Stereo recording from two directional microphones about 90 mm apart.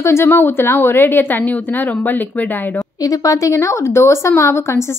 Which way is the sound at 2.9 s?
40° left (ahead or behind).